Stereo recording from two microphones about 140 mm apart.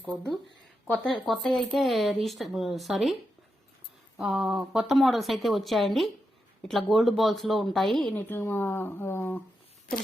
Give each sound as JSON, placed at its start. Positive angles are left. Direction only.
{"t": 0.1, "sound": "speech", "side_deg": 5}
{"t": 4.2, "sound": "speech", "side_deg": -5}
{"t": 8.2, "sound": "speech", "side_deg": 15}
{"t": 9.9, "sound": "a sound", "side_deg": 90}